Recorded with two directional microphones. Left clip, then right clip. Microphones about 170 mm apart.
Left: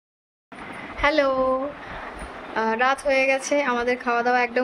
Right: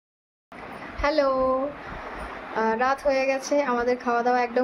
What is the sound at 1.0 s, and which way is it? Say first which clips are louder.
Speech: left 2 dB; 5° right (ahead or behind).